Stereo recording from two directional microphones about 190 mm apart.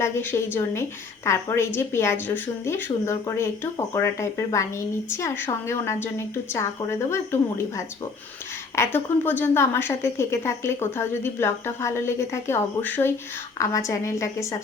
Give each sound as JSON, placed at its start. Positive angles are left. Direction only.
{"t": 0.0, "sound": "a woman's voice", "side_deg": 10}
{"t": 8.7, "sound": "a woman's voice", "side_deg": 15}